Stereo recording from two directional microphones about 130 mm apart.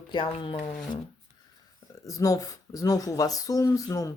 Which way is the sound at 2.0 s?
25° left (ahead or behind).